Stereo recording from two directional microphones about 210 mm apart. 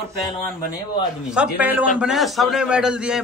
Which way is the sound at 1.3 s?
5° right (ahead or behind).